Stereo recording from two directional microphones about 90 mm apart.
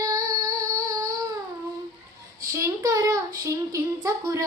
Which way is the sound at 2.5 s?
35° right (ahead or behind).